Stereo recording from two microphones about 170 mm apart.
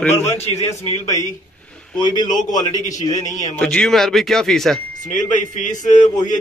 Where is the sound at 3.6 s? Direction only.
5° left (ahead or behind).